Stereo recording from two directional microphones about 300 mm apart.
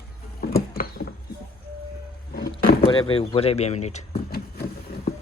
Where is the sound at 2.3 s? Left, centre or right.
Left.